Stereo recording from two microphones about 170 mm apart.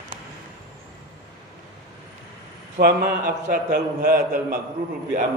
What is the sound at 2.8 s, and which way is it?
Speech, 65° right (ahead or behind).